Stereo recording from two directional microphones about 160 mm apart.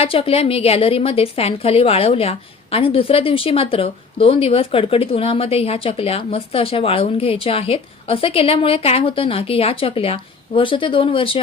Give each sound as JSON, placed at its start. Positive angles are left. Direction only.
{"t": 0.0, "sound": "speech", "side_deg": 35}